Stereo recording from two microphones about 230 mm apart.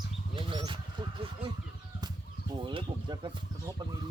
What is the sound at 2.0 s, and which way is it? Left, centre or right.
Chicken, centre.